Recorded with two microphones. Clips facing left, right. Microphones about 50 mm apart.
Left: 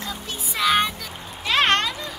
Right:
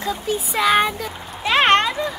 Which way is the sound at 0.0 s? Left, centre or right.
Centre.